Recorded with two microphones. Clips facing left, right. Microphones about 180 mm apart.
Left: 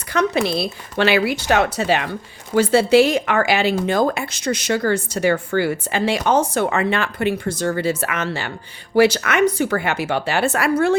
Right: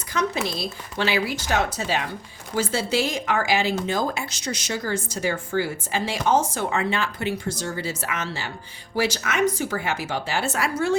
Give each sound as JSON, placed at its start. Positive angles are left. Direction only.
{"t": 0.1, "sound": "speech", "side_deg": 65}